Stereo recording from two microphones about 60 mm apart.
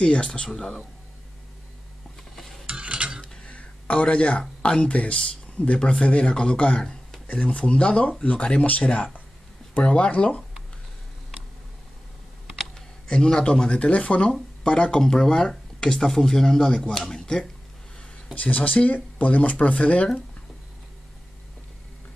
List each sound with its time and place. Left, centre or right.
0.0 s speech: centre
2.6 s stir: centre
3.2 s speech: centre
12.7 s speech: centre
18.3 s speech: left